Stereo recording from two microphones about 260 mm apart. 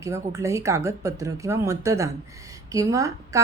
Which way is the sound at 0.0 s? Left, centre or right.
Centre.